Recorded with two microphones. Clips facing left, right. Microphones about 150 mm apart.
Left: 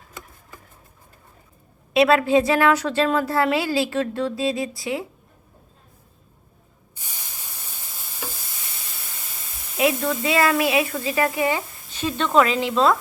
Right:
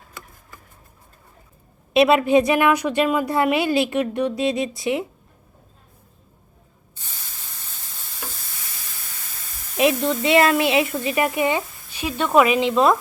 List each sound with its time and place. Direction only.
1.9 s a woman's voice: 20° right (ahead or behind)
7.0 s spray: 15° left (ahead or behind)
9.7 s a woman's voice: 20° right (ahead or behind)